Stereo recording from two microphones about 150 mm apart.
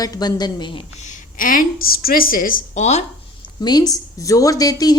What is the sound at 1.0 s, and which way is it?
A woman's voice, 60° left (ahead or behind).